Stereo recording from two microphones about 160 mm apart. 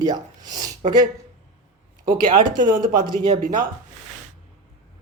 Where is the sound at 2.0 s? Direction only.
55° right (ahead or behind).